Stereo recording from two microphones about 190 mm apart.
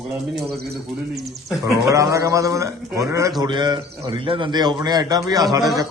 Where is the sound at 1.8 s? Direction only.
15° right (ahead or behind).